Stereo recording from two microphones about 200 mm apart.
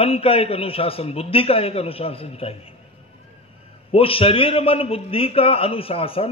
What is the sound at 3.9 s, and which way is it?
A man's voice, 30° left (ahead or behind).